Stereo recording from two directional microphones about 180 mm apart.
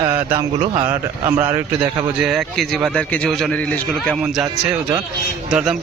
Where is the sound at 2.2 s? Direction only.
Centre (ahead or behind).